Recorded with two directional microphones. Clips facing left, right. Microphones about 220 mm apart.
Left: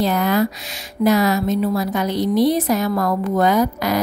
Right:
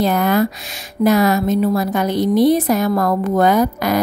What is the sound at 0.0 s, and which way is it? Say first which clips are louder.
A woman's voice: right 2 dB; 50° right (ahead or behind).